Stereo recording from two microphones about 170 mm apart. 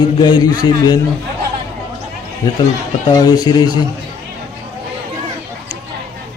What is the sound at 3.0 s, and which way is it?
Speech, 25° left (ahead or behind).